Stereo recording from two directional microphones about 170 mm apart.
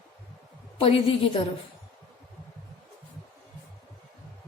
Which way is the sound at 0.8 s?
35° left (ahead or behind).